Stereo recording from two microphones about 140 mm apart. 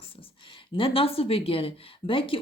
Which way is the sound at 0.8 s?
40° left (ahead or behind).